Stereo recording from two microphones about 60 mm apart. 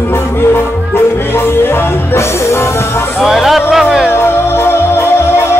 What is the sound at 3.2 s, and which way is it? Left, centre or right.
Music, centre.